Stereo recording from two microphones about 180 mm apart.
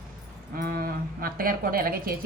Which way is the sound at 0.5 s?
55° right (ahead or behind).